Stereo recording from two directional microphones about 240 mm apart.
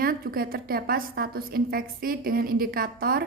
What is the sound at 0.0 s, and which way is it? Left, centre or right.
A woman's voice, right.